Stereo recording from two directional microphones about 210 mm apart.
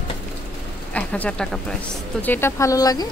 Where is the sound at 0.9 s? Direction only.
5° left (ahead or behind).